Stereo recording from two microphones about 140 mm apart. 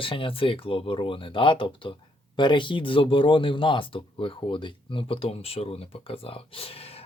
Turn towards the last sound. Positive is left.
turn(degrees=45)  # may be behind; listen again after turning